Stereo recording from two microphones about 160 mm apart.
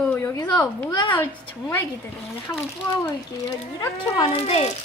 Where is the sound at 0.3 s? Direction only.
25° left (ahead or behind).